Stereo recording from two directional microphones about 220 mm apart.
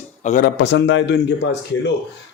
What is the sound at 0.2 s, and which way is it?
Speech, 35° left (ahead or behind).